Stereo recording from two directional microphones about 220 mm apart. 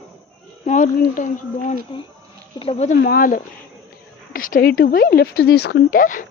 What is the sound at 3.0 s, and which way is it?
Speech, 40° left (ahead or behind).